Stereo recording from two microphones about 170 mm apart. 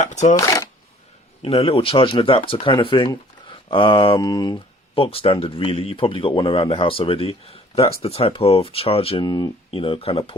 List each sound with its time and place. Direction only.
0.0 s shuffling cards: 45° left (ahead or behind)
0.3 s speech: 20° left (ahead or behind)
1.4 s speech: 35° left (ahead or behind)